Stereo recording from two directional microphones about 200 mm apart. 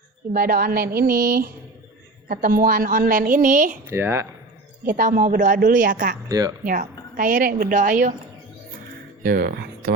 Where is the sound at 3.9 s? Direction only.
10° right (ahead or behind).